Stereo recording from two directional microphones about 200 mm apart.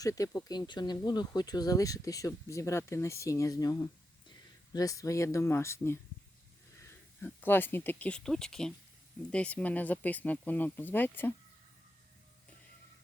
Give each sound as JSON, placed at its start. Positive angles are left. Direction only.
{"t": 0.0, "sound": "speech", "side_deg": 15}
{"t": 7.2, "sound": "speech", "side_deg": 10}